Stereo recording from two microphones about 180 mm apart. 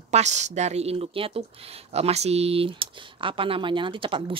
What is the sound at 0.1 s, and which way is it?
Speech, 40° right (ahead or behind).